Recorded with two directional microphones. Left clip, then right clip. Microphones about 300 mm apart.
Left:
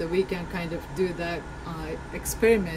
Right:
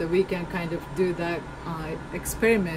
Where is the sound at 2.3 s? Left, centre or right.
Centre.